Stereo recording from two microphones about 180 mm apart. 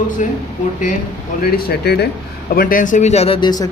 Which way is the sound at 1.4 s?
55° left (ahead or behind).